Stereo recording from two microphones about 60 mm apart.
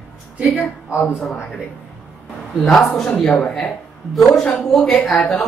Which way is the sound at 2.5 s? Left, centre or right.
Centre.